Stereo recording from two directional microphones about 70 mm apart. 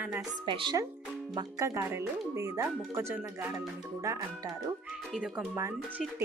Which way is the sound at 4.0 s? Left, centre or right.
Right.